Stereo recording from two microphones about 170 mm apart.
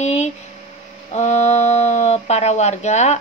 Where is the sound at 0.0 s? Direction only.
40° left (ahead or behind).